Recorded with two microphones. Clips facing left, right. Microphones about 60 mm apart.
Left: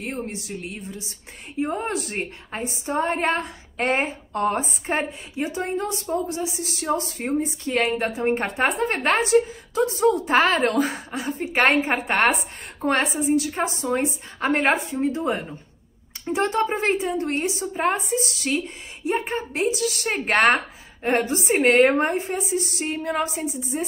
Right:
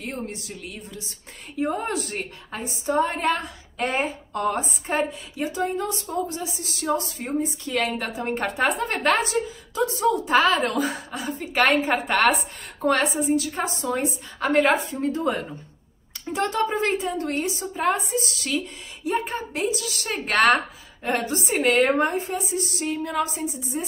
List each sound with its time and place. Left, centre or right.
0.0 s a woman's voice: left